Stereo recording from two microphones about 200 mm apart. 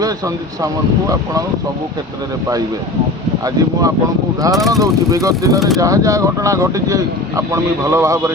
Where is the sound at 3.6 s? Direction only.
20° right (ahead or behind).